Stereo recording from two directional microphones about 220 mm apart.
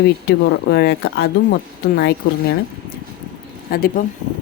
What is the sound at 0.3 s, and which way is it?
Speech, 50° left (ahead or behind).